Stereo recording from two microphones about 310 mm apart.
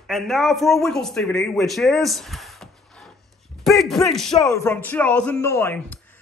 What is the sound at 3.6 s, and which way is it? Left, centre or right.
A man's voice, centre.